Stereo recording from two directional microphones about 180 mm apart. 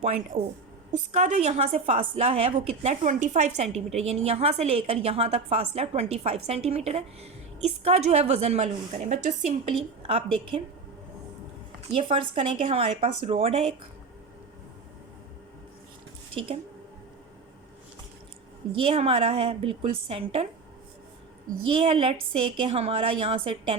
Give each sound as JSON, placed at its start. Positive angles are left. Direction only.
{"t": 0.0, "sound": "a woman's voice", "side_deg": -40}
{"t": 10.1, "sound": "a woman's voice", "side_deg": -30}
{"t": 11.8, "sound": "a woman's voice", "side_deg": -30}
{"t": 18.9, "sound": "a woman's voice", "side_deg": -30}
{"t": 21.7, "sound": "a woman's voice", "side_deg": -30}